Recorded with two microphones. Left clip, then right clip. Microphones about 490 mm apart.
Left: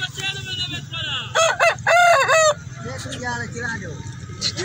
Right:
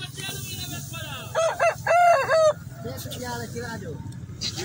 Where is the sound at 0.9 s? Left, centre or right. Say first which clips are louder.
Left 7 dB; right.